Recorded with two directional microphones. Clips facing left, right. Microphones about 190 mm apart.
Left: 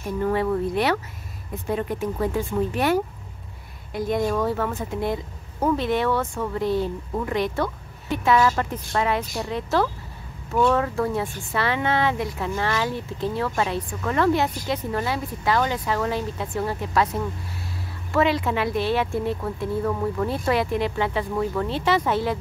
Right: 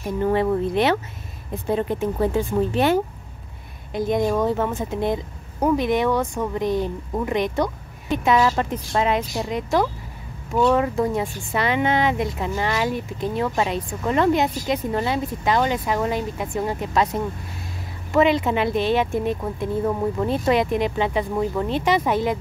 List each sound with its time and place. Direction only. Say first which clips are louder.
0.2 s speech: right 3 dB; 25° right (ahead or behind)
18.1 s speech: right 3 dB; 20° right (ahead or behind)